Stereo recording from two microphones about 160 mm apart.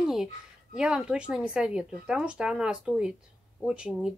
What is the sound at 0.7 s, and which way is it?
A woman's voice, 5° right (ahead or behind).